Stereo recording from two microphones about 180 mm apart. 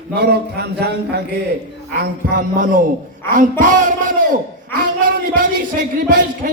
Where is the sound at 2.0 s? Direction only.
45° right (ahead or behind).